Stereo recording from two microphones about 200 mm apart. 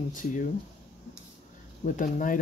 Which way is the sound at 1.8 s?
40° left (ahead or behind).